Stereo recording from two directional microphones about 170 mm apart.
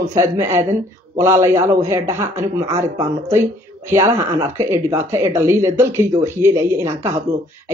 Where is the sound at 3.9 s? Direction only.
15° right (ahead or behind).